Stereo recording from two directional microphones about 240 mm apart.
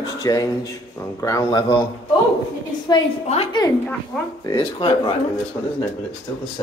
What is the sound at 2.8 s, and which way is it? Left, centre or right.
Speech, left.